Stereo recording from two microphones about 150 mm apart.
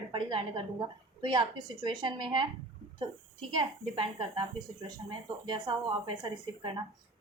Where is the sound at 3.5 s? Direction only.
35° right (ahead or behind).